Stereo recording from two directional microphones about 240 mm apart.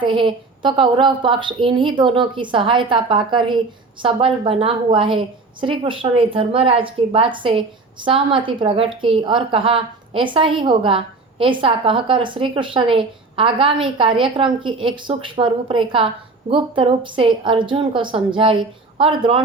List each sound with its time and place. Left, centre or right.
0.0 s a woman's voice: right